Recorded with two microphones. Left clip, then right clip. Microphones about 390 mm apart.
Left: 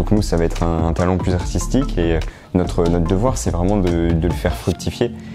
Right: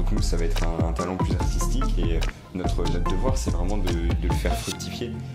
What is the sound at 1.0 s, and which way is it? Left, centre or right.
Speech, left.